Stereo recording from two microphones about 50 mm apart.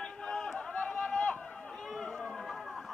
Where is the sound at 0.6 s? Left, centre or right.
Centre.